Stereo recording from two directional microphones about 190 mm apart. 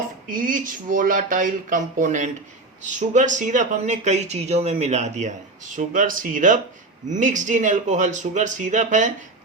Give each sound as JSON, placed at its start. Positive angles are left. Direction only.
{"t": 0.3, "sound": "speech", "side_deg": -45}